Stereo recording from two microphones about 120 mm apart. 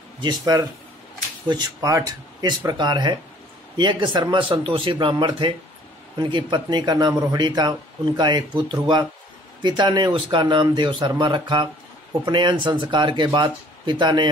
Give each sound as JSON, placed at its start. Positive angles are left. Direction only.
{"t": 0.2, "sound": "speech", "side_deg": -35}